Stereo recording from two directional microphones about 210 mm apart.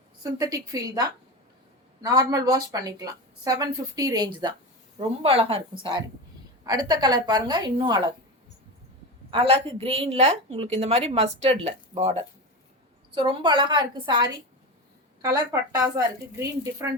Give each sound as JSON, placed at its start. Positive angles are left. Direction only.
{"t": 0.2, "sound": "speech", "side_deg": -15}
{"t": 9.3, "sound": "a woman's voice", "side_deg": -25}